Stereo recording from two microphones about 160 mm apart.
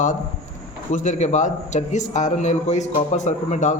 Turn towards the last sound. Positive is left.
turn(degrees=50)  # may be behind; listen again after turning